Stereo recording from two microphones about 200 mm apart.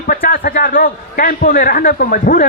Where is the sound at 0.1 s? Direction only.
45° left (ahead or behind).